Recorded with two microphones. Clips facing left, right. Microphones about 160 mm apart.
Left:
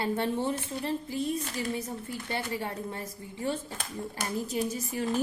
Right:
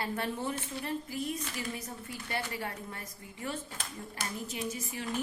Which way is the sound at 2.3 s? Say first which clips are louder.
Left 3 dB; 25° left (ahead or behind).